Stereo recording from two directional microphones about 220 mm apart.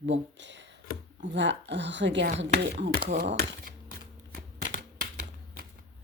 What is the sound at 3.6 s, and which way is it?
Shuffling cards, 40° right (ahead or behind).